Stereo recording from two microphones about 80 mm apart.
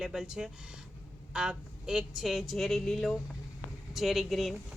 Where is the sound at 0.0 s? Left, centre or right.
Centre.